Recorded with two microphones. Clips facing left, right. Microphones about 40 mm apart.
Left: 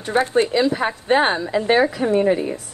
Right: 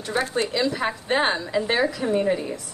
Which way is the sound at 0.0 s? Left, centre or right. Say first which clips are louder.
Left 6 dB; left.